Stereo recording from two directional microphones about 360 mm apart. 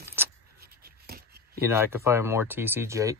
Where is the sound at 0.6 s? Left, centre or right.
Right.